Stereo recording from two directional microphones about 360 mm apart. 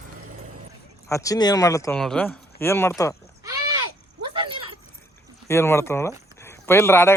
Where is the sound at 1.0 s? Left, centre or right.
Centre.